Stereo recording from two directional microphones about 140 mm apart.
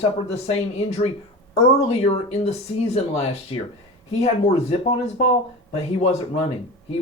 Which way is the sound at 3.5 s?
40° left (ahead or behind).